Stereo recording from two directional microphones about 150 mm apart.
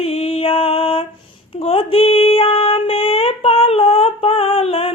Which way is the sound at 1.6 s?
40° left (ahead or behind).